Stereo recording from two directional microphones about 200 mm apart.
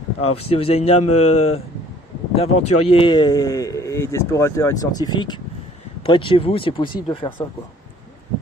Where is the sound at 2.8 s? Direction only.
25° left (ahead or behind).